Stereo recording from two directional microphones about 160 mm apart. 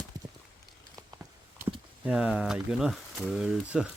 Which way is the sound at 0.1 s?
25° right (ahead or behind).